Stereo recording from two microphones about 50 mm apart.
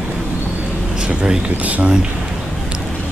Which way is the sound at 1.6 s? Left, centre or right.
Right.